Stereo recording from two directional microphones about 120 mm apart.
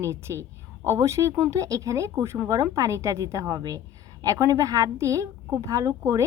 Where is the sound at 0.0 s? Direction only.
25° right (ahead or behind).